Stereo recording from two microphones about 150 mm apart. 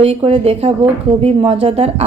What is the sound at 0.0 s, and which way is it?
A woman's voice, 40° right (ahead or behind).